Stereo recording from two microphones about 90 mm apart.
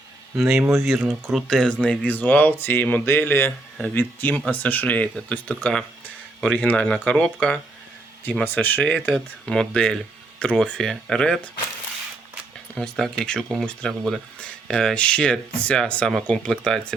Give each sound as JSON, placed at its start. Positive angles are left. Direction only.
{"t": 0.3, "sound": "speech", "side_deg": 0}
{"t": 8.4, "sound": "speech", "side_deg": 20}
{"t": 9.1, "sound": "speech", "side_deg": 10}
{"t": 12.7, "sound": "speech", "side_deg": 10}